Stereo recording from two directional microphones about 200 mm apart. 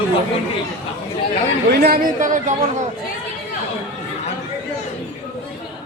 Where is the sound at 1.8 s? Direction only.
45° right (ahead or behind).